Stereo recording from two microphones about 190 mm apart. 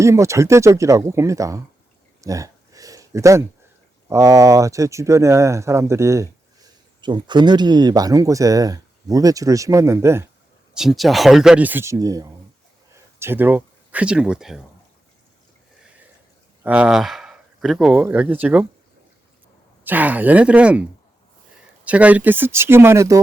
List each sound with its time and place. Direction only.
0.0 s speech: 15° right (ahead or behind)
2.2 s a sound: 15° right (ahead or behind)
4.1 s speech: 15° right (ahead or behind)
10.8 s speech: centre (ahead or behind)
16.6 s speech: 5° right (ahead or behind)
19.8 s speech: 10° right (ahead or behind)
21.8 s speech: 5° right (ahead or behind)